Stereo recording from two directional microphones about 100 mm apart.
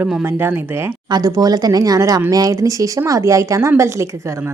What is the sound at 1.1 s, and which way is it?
A woman's voice, 40° right (ahead or behind).